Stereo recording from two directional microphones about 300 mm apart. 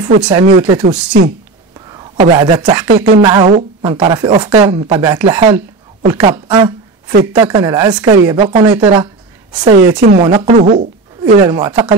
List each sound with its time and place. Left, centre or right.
0.0 s speech: centre
0.8 s speech: right
1.9 s speech: centre
9.9 s speech: right
10.2 s speech: centre
11.4 s speech: centre